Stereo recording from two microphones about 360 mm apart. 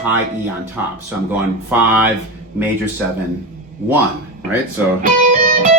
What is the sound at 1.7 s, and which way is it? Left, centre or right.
Speech, centre.